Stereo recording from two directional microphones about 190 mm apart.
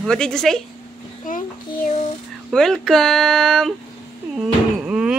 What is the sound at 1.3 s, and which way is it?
Child singing, 45° left (ahead or behind).